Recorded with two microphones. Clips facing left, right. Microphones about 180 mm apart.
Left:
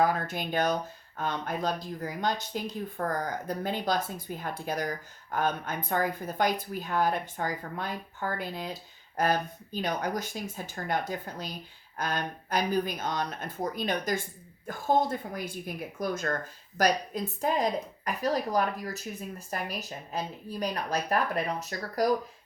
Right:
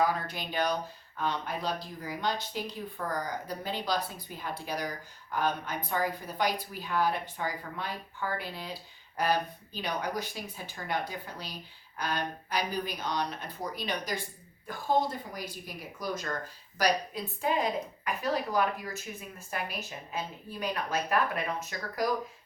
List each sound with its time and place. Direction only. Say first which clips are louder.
0.0 s a woman's voice: left 3 dB; 50° left (ahead or behind)